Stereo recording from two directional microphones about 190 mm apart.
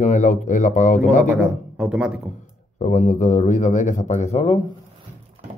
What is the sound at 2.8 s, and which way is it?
Speech, 40° left (ahead or behind).